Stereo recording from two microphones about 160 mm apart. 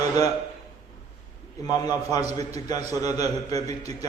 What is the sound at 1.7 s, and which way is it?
A man's voice, 25° left (ahead or behind).